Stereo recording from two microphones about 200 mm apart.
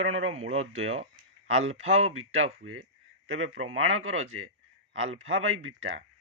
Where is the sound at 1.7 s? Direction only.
90° right.